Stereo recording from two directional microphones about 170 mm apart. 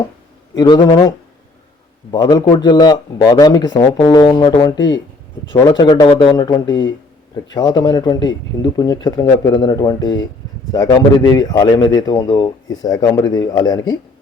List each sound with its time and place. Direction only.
0.5 s a man's voice: 25° left (ahead or behind)